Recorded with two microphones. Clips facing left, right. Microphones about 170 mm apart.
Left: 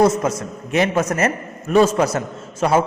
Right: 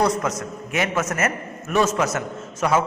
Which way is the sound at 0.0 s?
25° left (ahead or behind).